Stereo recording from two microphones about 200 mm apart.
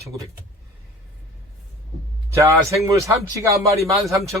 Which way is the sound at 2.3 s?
10° right (ahead or behind).